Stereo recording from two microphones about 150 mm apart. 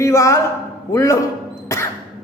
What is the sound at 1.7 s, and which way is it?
Music, 20° left (ahead or behind).